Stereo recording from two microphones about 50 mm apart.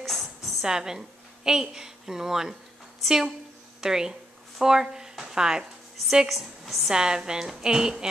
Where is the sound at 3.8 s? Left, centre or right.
Centre.